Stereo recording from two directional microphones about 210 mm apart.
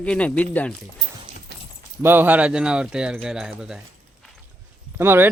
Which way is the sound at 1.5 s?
50° right (ahead or behind).